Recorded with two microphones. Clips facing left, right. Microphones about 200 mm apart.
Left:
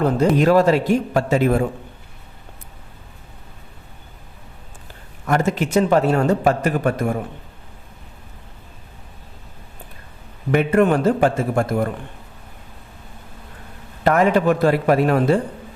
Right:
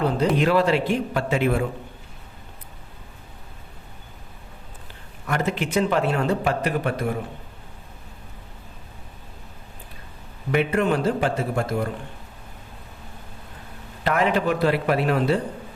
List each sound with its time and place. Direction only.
0.3 s speech: 45° left (ahead or behind)
5.2 s speech: 45° left (ahead or behind)
10.5 s speech: 50° left (ahead or behind)
14.0 s speech: 45° left (ahead or behind)